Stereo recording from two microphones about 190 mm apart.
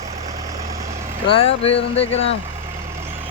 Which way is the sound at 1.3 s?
30° left (ahead or behind).